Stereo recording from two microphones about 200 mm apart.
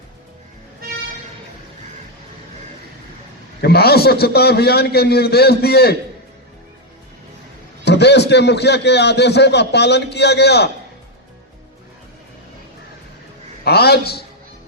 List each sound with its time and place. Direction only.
3.6 s a man's voice: 50° left (ahead or behind)
7.9 s a man's voice: 55° left (ahead or behind)
13.7 s a man's voice: 55° left (ahead or behind)